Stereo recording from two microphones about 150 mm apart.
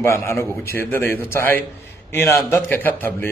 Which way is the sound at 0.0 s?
15° left (ahead or behind).